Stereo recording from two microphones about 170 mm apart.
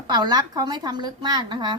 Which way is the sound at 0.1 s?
25° right (ahead or behind).